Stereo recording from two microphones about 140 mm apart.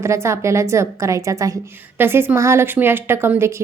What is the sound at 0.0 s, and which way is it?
A woman's voice, 20° right (ahead or behind).